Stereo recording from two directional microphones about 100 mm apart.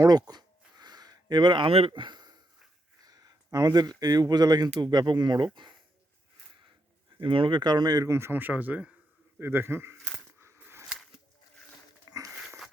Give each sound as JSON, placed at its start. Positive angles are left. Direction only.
{"t": 0.1, "sound": "a sound", "side_deg": -45}
{"t": 3.0, "sound": "speech", "side_deg": -40}
{"t": 7.2, "sound": "speech", "side_deg": -55}
{"t": 8.1, "sound": "speech", "side_deg": -25}
{"t": 10.4, "sound": "a sound", "side_deg": -25}
{"t": 12.0, "sound": "wheeze", "side_deg": -35}